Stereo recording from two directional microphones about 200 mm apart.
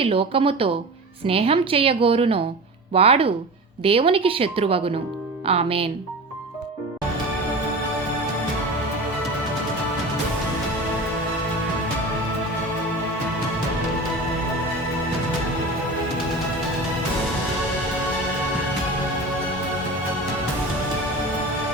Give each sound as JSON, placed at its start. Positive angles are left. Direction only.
{"t": 0.0, "sound": "a woman's voice", "side_deg": -25}